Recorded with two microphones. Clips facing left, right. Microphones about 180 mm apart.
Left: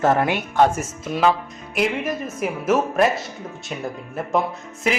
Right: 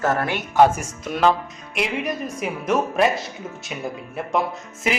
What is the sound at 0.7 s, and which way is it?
A man's voice, centre (ahead or behind).